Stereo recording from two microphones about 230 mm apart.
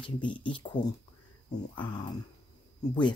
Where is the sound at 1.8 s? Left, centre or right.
Centre.